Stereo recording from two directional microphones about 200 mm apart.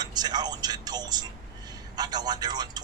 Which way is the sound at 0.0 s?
20° right (ahead or behind).